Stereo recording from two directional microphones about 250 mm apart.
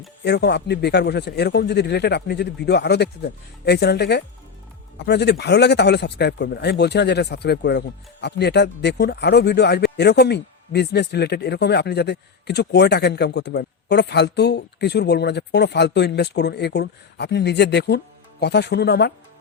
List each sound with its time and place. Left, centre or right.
0.3 s a man's voice: left